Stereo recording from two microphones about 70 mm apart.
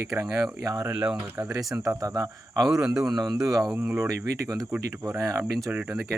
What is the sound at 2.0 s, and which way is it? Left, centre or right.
Speech, right.